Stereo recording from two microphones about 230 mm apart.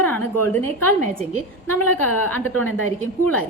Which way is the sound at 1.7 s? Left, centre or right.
Left.